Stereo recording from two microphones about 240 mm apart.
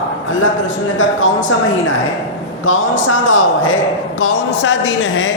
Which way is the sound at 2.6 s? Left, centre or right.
Left.